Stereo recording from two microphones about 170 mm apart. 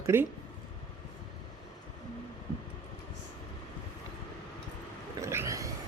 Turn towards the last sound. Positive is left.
turn(degrees=-20)  # may be behind; listen again after turning